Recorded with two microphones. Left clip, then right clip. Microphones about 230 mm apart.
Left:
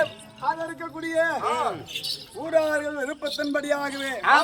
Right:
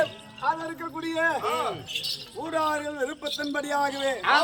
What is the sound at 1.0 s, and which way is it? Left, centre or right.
A man's voice, centre.